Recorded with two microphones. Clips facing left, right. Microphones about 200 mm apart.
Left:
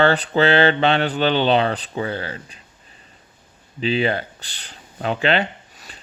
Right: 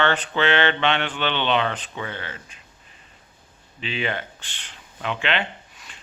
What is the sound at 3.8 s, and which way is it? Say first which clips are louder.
Speech: left 8 dB; 35° left (ahead or behind).